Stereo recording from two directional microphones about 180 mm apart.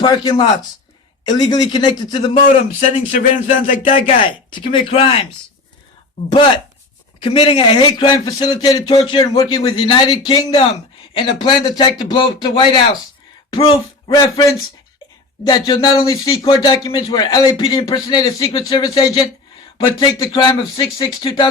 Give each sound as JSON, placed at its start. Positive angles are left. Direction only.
{"t": 0.0, "sound": "speech", "side_deg": 25}
{"t": 2.8, "sound": "speech", "side_deg": 45}
{"t": 4.2, "sound": "speech", "side_deg": 30}
{"t": 7.2, "sound": "speech", "side_deg": 30}
{"t": 15.4, "sound": "speech", "side_deg": 25}
{"t": 16.0, "sound": "speech", "side_deg": 15}